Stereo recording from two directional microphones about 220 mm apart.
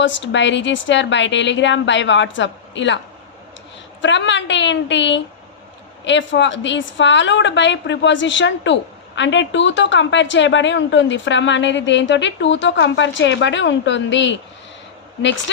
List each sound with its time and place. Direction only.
0.0 s a woman's voice: 55° left (ahead or behind)
4.0 s a woman's voice: 55° left (ahead or behind)